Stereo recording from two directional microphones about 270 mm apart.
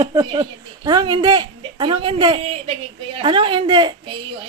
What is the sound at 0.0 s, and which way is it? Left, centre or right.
A woman's voice, centre.